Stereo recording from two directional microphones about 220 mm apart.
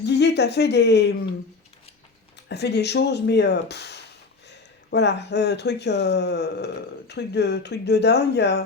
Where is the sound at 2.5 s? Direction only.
50° left (ahead or behind).